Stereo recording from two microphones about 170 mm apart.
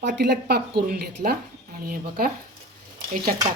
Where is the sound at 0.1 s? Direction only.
70° right (ahead or behind).